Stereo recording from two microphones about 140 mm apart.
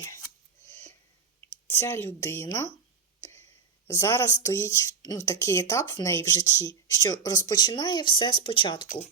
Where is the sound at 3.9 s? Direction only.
20° left (ahead or behind).